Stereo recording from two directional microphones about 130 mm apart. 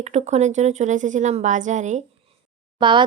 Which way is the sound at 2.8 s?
40° right (ahead or behind).